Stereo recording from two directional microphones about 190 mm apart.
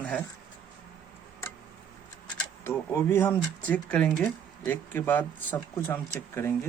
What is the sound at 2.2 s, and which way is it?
Speech, 10° left (ahead or behind).